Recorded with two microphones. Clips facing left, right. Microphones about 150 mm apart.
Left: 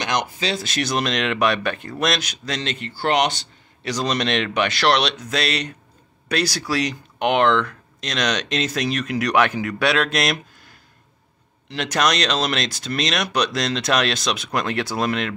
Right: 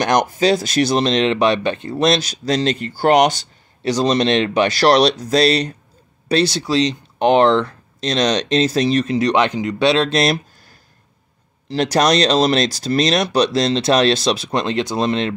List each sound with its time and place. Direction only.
0.0 s speech: 45° right (ahead or behind)
3.9 s speech: 30° right (ahead or behind)